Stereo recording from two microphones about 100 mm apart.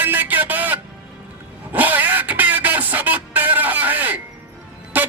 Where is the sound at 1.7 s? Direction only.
15° right (ahead or behind).